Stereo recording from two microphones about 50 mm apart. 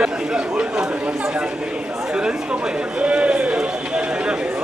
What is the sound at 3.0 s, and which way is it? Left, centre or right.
Run, right.